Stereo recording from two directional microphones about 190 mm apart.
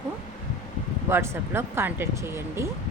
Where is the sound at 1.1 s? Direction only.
15° right (ahead or behind).